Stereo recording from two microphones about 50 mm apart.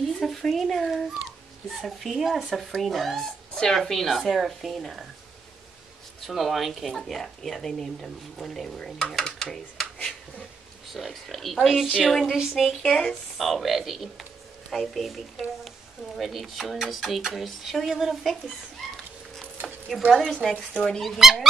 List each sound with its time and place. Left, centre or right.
0.0 s speech: centre
1.7 s speech: centre
6.2 s speech: centre
10.9 s speech: centre
12.3 s speech: centre
12.8 s speech: centre
13.4 s speech: centre
20.2 s speech: centre
21.0 s speech: centre